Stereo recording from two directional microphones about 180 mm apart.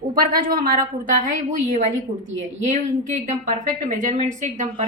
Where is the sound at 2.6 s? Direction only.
45° right (ahead or behind).